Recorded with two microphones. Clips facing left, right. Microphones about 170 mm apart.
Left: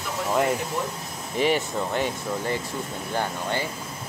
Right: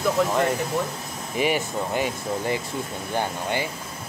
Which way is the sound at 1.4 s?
10° right (ahead or behind).